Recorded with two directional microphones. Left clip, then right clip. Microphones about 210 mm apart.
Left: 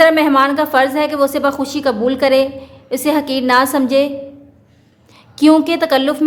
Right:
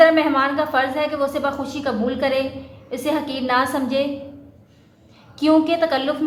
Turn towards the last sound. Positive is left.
turn(degrees=55)  # may be behind; listen again after turning